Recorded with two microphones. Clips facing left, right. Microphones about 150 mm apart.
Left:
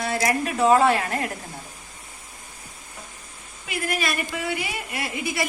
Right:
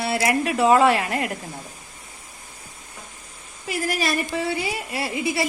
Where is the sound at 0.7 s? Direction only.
35° left (ahead or behind).